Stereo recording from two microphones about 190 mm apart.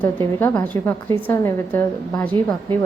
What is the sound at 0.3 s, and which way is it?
A woman's voice, 10° left (ahead or behind).